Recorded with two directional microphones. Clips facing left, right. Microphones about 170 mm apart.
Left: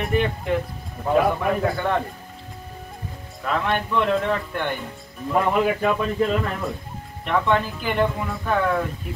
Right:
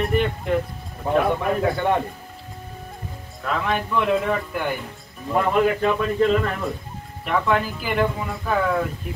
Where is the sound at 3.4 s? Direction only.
Centre (ahead or behind).